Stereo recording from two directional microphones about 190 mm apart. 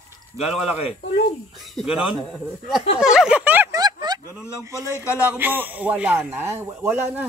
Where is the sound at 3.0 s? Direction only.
5° right (ahead or behind); by 4.2 s 20° right (ahead or behind).